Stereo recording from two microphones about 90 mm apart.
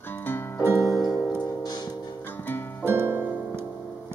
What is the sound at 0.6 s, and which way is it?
Music, 30° right (ahead or behind).